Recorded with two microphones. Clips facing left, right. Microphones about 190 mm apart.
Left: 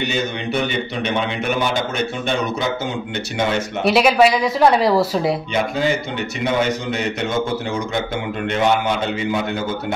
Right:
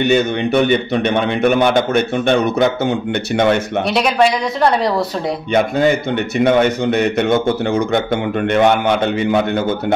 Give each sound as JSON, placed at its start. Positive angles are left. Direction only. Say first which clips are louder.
{"t": 0.0, "sound": "a man's voice", "louder": "right 8 dB", "side_deg": -55}
{"t": 3.8, "sound": "speech", "louder": "left 3 dB", "side_deg": 5}
{"t": 5.5, "sound": "a man's voice", "louder": "right 6 dB", "side_deg": -55}